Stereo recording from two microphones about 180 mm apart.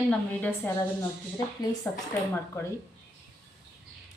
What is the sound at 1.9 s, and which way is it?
Speech, 15° left (ahead or behind).